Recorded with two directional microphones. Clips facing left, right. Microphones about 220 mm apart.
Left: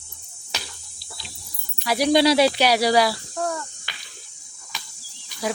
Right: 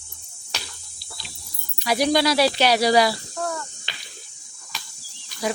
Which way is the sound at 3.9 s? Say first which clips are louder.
Right 2 dB; 25° right (ahead or behind).